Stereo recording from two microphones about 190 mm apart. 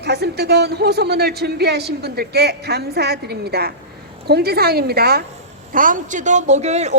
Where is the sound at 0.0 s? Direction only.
60° right (ahead or behind).